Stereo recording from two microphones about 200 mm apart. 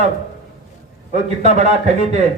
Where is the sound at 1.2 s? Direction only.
35° right (ahead or behind).